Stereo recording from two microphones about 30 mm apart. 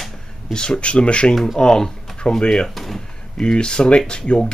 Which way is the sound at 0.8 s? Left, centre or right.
Left.